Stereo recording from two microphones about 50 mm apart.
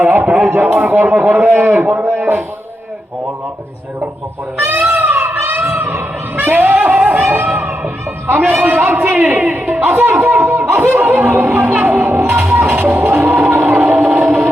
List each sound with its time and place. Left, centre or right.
0.0 s a sound: right
0.3 s a sound: right
0.6 s a man's voice: right
4.6 s speech: right
7.0 s speech: right
7.4 s a sound: right
8.3 s a man's voice: right
10.3 s snicker: right
10.8 s speech: right
11.6 s music: right